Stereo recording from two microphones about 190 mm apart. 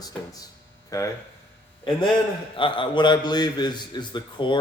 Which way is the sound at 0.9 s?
15° left (ahead or behind).